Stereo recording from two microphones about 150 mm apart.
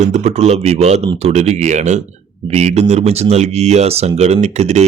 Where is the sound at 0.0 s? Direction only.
50° right (ahead or behind).